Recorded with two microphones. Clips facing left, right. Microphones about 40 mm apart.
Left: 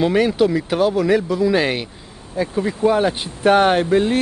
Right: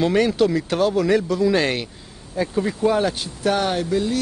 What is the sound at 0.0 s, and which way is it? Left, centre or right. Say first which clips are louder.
Speech: left 2 dB; centre.